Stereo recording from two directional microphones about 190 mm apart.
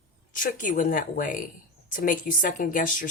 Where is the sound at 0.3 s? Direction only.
45° left (ahead or behind).